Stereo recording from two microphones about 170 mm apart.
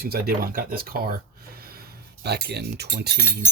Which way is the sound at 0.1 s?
60° right (ahead or behind).